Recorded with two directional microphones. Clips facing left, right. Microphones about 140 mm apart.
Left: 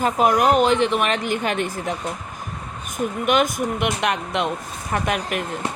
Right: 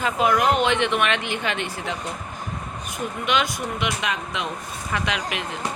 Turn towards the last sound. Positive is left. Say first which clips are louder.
# left 4 dB
turn(degrees=50)  # may be behind; listen again after turning